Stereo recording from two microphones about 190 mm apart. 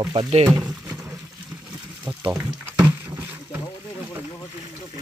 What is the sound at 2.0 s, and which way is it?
Water, 10° right (ahead or behind).